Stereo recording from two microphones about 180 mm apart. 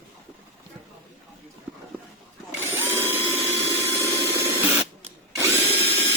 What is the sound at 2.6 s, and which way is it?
Tools, 15° right (ahead or behind).